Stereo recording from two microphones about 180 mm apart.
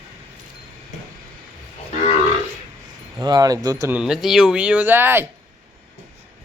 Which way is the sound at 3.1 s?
20° right (ahead or behind).